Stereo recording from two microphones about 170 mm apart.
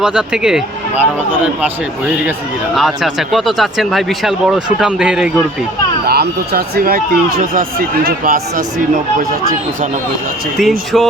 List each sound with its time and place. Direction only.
0.0 s a man's voice: 5° right (ahead or behind)
6.1 s speech: 70° right (ahead or behind)
10.6 s speech: centre (ahead or behind)